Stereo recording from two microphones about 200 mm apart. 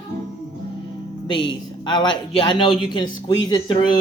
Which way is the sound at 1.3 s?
25° left (ahead or behind).